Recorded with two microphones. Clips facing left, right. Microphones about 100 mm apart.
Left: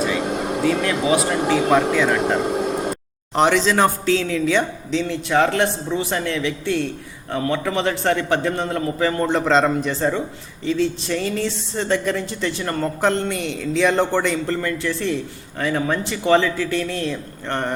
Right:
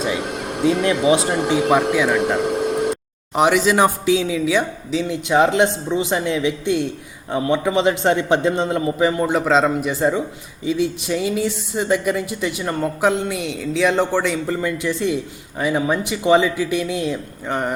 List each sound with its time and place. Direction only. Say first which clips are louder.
0.6 s speech: right 5 dB; 25° right (ahead or behind)
1.7 s a woman's voice: right 1 dB; 10° right (ahead or behind)